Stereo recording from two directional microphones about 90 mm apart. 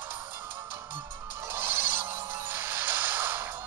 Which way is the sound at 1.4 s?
25° right (ahead or behind).